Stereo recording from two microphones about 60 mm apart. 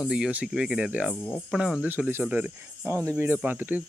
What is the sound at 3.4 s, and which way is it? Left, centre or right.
Speech, right.